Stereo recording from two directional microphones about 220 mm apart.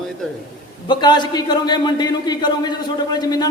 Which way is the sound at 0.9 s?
20° left (ahead or behind).